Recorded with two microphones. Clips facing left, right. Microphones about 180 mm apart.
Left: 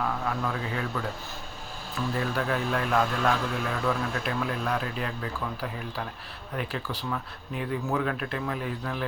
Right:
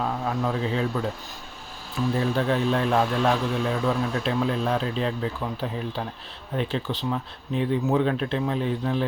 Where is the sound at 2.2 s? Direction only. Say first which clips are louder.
Right 5 dB; 25° right (ahead or behind).